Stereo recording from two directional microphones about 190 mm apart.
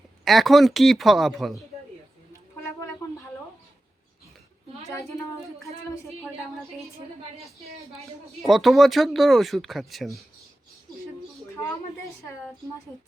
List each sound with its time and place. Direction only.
0.3 s speech: centre (ahead or behind)
4.9 s a sound: 15° left (ahead or behind)
7.9 s speech: centre (ahead or behind)